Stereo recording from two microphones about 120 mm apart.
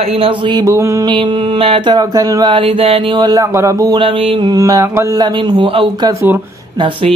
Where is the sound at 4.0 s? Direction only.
50° right (ahead or behind).